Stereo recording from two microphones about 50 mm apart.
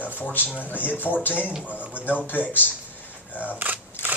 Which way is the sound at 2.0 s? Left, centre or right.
Left.